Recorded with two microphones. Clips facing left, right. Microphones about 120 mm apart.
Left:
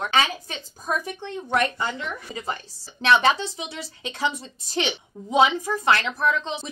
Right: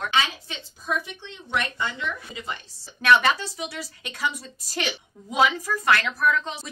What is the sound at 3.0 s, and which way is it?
A woman's voice, 25° left (ahead or behind).